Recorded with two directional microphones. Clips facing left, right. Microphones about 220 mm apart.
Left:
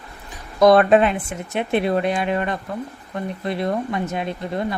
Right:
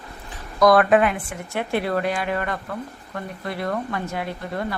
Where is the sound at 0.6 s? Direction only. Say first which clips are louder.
Left 3 dB; 25° left (ahead or behind).